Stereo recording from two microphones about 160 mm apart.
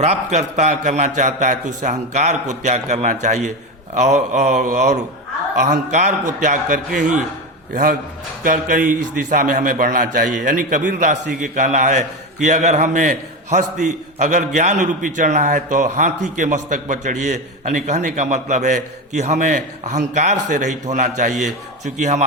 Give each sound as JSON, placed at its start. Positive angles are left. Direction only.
{"t": 0.0, "sound": "a man's voice", "side_deg": -45}